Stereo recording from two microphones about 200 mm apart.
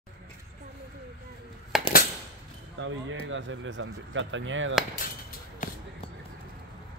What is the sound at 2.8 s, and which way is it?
Speech, 70° right (ahead or behind).